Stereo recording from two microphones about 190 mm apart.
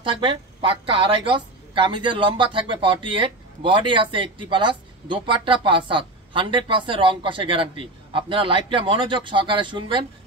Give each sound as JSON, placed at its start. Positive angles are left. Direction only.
{"t": 0.0, "sound": "a woman's voice", "side_deg": -25}